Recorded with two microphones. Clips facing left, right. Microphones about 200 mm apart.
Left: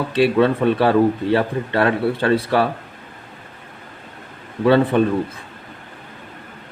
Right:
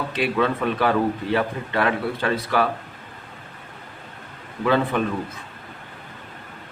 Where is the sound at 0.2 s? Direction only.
30° left (ahead or behind).